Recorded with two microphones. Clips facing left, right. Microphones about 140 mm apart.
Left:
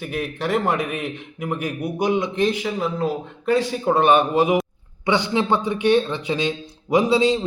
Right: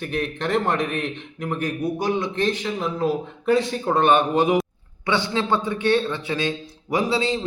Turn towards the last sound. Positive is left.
turn(degrees=15)  # may be behind; listen again after turning